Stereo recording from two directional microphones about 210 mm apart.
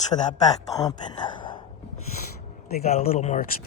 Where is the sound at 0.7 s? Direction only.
15° left (ahead or behind).